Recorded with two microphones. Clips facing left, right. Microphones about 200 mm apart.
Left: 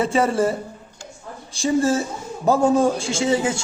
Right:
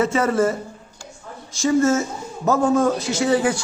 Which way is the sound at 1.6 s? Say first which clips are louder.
Right 2 dB; 30° left (ahead or behind).